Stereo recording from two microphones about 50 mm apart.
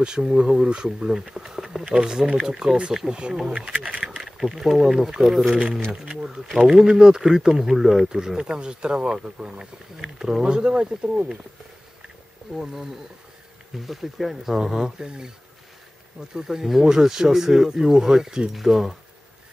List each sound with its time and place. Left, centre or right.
0.0 s speech: centre
4.0 s speech: centre
6.0 s speech: centre
7.0 s speech: centre
13.7 s speech: centre
16.3 s speech: centre